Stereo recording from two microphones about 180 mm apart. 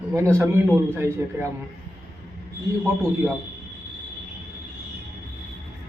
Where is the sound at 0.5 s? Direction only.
15° right (ahead or behind).